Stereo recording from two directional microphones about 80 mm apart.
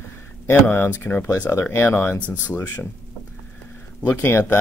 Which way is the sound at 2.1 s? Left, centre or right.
Right.